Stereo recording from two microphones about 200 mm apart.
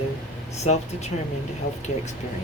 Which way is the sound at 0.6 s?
35° left (ahead or behind).